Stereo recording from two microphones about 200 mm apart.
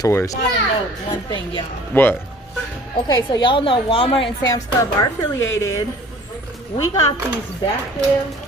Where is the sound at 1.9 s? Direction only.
10° left (ahead or behind).